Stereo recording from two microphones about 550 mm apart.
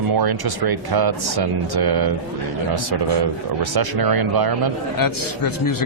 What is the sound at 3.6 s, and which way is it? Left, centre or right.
Speech, right.